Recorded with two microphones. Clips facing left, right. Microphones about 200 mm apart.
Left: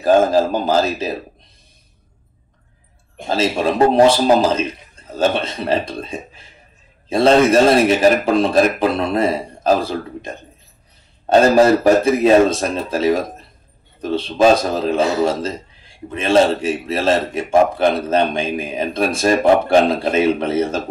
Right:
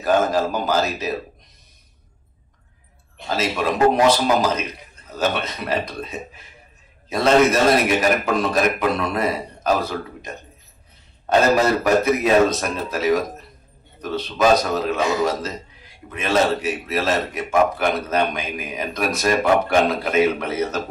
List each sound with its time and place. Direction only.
0.0 s a man's voice: 30° left (ahead or behind)
3.3 s a man's voice: 30° left (ahead or behind)